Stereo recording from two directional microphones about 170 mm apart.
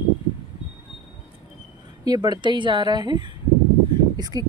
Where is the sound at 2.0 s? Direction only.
25° right (ahead or behind).